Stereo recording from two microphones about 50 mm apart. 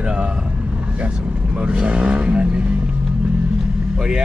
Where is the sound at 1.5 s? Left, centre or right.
Right.